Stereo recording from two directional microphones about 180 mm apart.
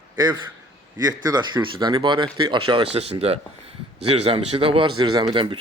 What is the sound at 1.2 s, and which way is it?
Speech, 25° right (ahead or behind).